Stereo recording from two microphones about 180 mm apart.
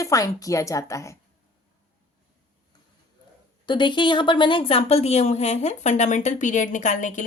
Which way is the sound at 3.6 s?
25° left (ahead or behind).